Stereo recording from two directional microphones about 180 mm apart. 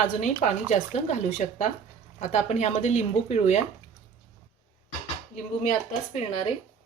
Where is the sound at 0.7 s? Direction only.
40° left (ahead or behind).